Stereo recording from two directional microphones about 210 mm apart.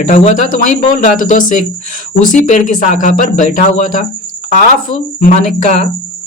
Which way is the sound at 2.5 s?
35° left (ahead or behind).